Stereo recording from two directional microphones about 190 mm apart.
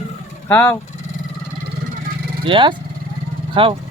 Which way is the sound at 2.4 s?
25° right (ahead or behind).